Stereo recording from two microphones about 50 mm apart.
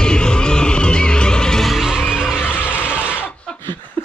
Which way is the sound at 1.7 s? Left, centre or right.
Centre.